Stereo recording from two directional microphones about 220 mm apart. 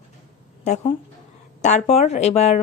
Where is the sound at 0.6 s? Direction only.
30° left (ahead or behind).